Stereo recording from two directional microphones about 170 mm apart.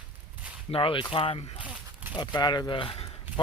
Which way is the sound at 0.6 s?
35° left (ahead or behind).